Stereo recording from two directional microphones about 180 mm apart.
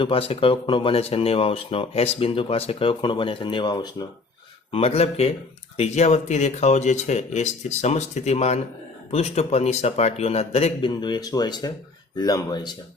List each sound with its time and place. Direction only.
0.0 s speech: 30° left (ahead or behind)